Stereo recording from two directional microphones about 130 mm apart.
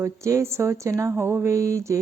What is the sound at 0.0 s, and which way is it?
Speech, 20° right (ahead or behind).